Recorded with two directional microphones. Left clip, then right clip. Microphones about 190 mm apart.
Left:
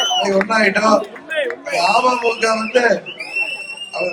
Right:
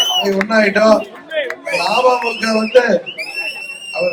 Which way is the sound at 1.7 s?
40° left (ahead or behind).